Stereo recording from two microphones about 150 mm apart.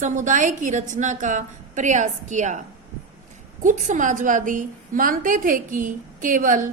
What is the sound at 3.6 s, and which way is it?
A woman's voice, 55° right (ahead or behind).